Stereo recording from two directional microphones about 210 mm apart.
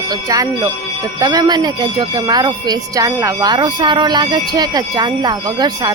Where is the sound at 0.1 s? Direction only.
15° right (ahead or behind).